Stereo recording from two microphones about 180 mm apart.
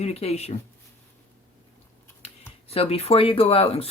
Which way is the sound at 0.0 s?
35° left (ahead or behind).